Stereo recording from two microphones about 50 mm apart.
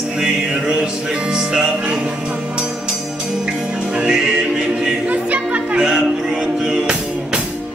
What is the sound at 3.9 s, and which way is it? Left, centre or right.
Music, centre.